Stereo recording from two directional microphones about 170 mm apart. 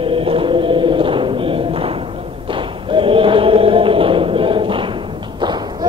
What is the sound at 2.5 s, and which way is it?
Chant, 30° right (ahead or behind).